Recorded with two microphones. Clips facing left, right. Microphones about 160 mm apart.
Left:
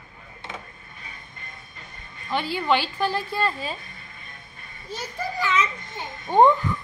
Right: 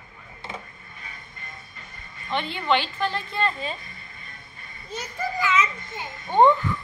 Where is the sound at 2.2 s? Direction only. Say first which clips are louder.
Left 1 dB; 5° left (ahead or behind).